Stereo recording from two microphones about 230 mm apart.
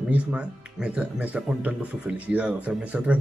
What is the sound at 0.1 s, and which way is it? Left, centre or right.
Speech, centre.